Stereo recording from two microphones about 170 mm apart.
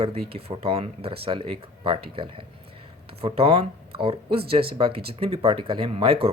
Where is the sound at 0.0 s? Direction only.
35° right (ahead or behind).